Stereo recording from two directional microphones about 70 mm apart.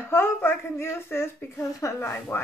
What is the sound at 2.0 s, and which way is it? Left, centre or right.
Speech, left.